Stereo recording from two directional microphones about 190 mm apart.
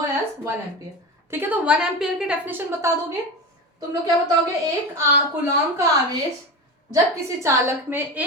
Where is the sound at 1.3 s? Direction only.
10° right (ahead or behind).